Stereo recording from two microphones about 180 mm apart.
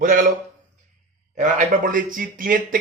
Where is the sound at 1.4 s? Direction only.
45° right (ahead or behind).